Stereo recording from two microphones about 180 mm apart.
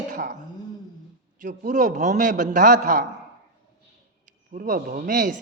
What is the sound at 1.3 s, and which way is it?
Speech, 45° right (ahead or behind).